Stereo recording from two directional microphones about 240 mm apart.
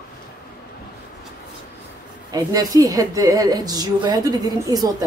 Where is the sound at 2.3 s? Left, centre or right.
Centre.